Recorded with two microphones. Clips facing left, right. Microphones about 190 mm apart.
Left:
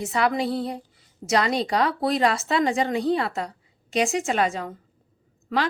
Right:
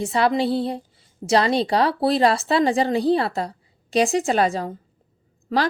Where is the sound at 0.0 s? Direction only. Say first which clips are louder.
Right 4 dB; 30° right (ahead or behind).